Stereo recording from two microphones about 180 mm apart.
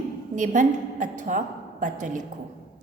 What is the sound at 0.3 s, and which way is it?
A woman's voice, 45° right (ahead or behind).